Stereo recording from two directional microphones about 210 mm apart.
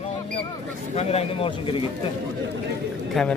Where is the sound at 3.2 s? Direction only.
Centre (ahead or behind).